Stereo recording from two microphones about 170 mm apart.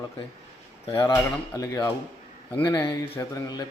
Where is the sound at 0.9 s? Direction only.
20° left (ahead or behind).